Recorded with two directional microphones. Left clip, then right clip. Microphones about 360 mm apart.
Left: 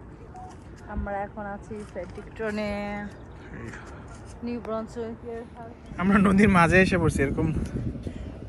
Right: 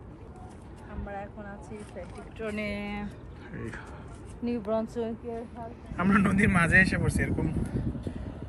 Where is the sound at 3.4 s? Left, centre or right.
Centre.